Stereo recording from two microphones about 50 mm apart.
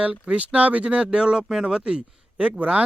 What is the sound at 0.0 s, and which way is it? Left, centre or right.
Speech, right.